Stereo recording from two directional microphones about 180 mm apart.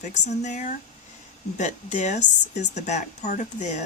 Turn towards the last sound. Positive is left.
turn(degrees=40)  # may be behind; listen again after turning